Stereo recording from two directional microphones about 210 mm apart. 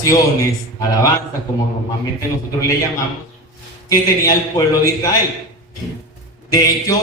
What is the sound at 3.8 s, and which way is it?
Speech, 15° left (ahead or behind).